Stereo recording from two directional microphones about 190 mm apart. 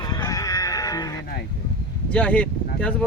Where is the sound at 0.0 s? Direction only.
20° left (ahead or behind).